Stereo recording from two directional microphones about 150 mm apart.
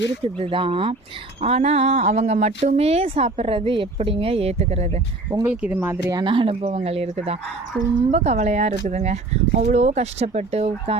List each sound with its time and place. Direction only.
0.3 s speech: 35° right (ahead or behind)
5.5 s speech: 10° right (ahead or behind)
6.2 s speech: 35° right (ahead or behind)